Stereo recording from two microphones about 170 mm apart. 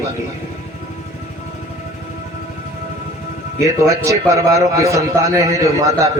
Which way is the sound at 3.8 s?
20° right (ahead or behind).